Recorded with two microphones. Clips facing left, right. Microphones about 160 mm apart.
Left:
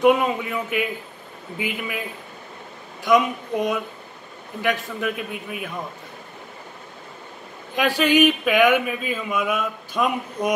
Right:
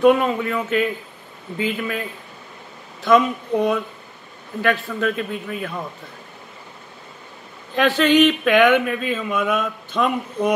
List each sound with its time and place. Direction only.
0.0 s a woman's voice: 15° left (ahead or behind)
4.6 s speech: 15° left (ahead or behind)
7.7 s speech: 10° left (ahead or behind)